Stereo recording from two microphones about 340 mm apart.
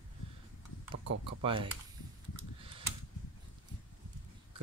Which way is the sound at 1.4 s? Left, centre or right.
Centre.